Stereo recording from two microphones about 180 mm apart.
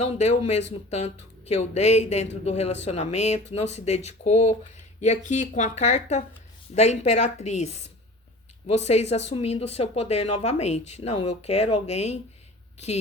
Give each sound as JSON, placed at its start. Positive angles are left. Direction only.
{"t": 0.0, "sound": "speech", "side_deg": 35}